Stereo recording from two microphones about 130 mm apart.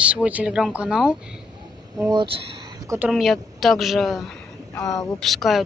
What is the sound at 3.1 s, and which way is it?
Speech, centre (ahead or behind).